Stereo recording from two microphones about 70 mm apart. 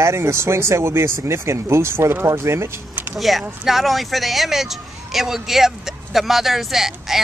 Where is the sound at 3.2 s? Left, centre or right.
Centre.